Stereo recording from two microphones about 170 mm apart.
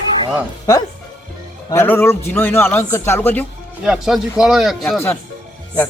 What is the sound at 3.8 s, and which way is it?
Speech, 5° right (ahead or behind).